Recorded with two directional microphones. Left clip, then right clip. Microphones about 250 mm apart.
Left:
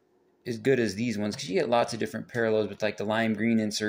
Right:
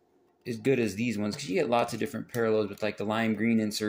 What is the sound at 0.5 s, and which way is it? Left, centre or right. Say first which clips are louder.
Speech: left 2 dB; centre.